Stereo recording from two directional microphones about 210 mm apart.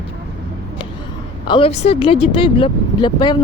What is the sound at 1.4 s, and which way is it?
Speech, 25° left (ahead or behind).